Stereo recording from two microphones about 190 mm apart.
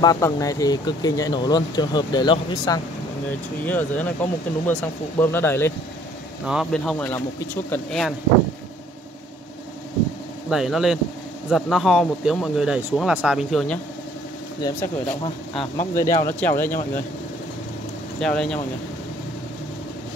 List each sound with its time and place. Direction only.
0.0 s speech: 20° left (ahead or behind)
3.6 s speech: 10° left (ahead or behind)
6.4 s speech: centre (ahead or behind)
10.5 s speech: centre (ahead or behind)
14.6 s speech: 15° left (ahead or behind)
15.5 s speech: 25° left (ahead or behind)
16.2 s speech: 10° left (ahead or behind)
18.2 s speech: 5° left (ahead or behind)